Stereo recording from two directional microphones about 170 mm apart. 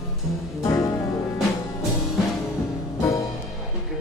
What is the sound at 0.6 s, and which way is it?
Music, 20° left (ahead or behind).